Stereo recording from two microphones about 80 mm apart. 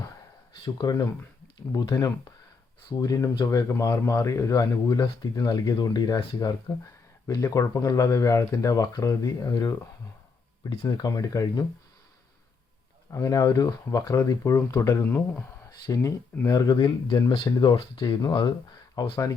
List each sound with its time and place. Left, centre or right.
0.8 s speech: left
3.0 s speech: left
6.7 s speech: left
13.1 s speech: left
15.0 s speech: left
15.9 s speech: left
19.0 s speech: left